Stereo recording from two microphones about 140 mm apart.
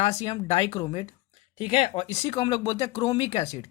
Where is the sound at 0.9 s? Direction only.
45° left (ahead or behind).